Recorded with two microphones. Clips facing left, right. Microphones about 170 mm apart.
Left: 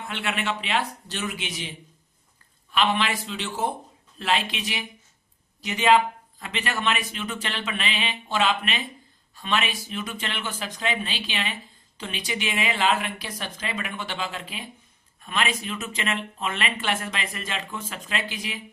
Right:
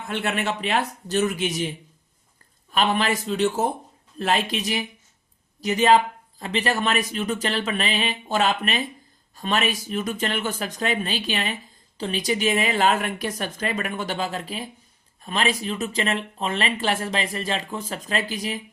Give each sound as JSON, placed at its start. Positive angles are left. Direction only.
{"t": 0.1, "sound": "speech", "side_deg": -40}
{"t": 2.7, "sound": "speech", "side_deg": -40}